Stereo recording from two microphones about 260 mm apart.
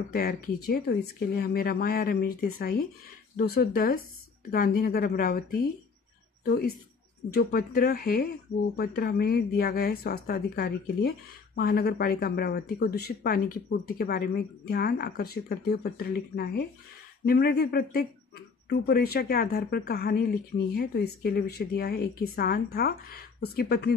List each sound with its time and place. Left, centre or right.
0.1 s speech: left